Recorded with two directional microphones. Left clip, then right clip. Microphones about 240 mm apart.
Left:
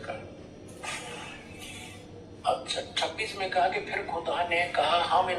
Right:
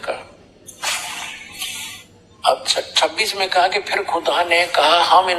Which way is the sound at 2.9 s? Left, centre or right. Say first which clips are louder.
Right 13 dB; right.